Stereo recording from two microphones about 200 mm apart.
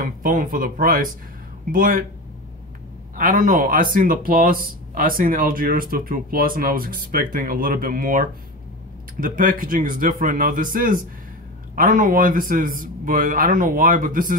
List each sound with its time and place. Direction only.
0.0 s speech: 45° right (ahead or behind)
3.2 s speech: 45° right (ahead or behind)